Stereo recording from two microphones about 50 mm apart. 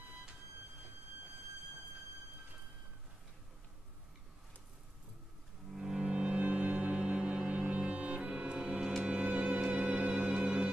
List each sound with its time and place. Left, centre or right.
5.8 s music: centre